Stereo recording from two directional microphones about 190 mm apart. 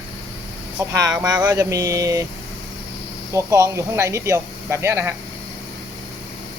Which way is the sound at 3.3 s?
15° right (ahead or behind).